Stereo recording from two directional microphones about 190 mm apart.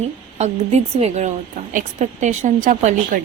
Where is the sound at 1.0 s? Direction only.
35° right (ahead or behind).